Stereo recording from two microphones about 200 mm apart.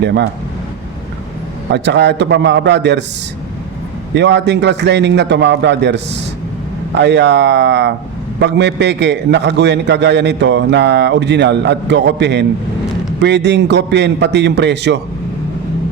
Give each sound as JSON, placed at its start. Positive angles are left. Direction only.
{"t": 0.0, "sound": "a man's voice", "side_deg": -60}
{"t": 1.7, "sound": "a man's voice", "side_deg": -60}
{"t": 4.1, "sound": "a man's voice", "side_deg": -60}